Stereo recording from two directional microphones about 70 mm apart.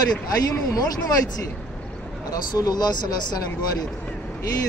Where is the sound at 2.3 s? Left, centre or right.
Left.